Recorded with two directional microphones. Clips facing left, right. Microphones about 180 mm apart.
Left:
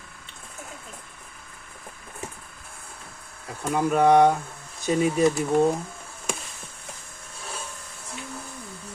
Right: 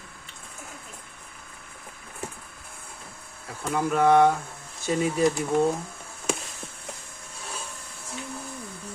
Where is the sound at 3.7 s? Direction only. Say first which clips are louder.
Left 2 dB; 15° left (ahead or behind).